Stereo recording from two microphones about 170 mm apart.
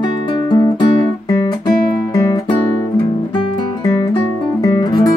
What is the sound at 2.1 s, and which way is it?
Music, 25° left (ahead or behind).